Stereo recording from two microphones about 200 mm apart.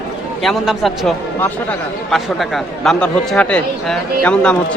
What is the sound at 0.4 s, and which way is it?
Speech, centre (ahead or behind).